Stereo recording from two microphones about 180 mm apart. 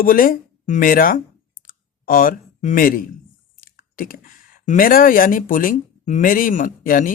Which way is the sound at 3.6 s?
50° left (ahead or behind).